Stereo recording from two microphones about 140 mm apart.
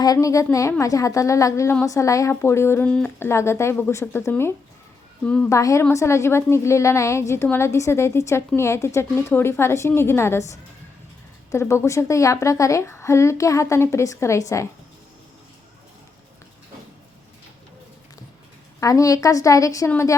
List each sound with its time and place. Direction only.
0.0 s a woman's voice: 25° left (ahead or behind)
5.5 s a woman's voice: 20° left (ahead or behind)
18.8 s a woman's voice: 25° left (ahead or behind)